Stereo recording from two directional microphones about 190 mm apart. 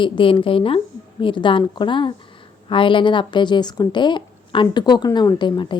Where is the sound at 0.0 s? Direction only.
25° left (ahead or behind).